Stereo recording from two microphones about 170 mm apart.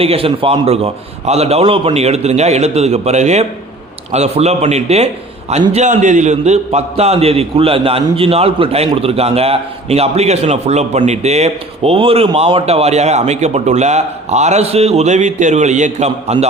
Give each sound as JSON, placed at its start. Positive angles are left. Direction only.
{"t": 0.0, "sound": "a man's voice", "side_deg": -35}